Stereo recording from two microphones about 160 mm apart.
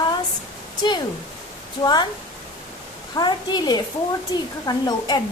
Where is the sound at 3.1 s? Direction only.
25° left (ahead or behind).